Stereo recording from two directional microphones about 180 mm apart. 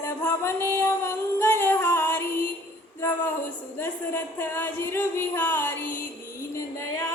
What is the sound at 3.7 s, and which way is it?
Speech, 10° left (ahead or behind).